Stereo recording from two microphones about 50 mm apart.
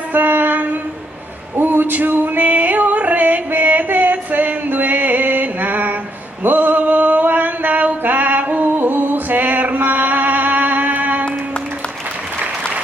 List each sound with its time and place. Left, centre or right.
0.1 s female singing: right
1.6 s yodeling: right
6.4 s mantra: right
8.6 s music: right